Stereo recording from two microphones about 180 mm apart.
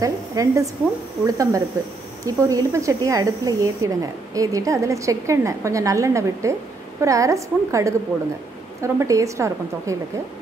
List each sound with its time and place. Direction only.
0.0 s speech: 20° right (ahead or behind)